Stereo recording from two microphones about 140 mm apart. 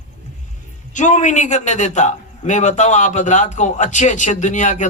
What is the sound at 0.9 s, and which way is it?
A man's voice, 60° left (ahead or behind).